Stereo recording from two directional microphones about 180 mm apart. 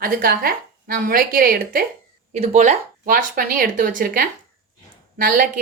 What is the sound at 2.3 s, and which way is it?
A woman's voice, 40° right (ahead or behind).